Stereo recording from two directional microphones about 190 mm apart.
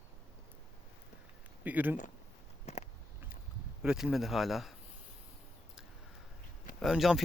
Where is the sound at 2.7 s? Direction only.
35° left (ahead or behind).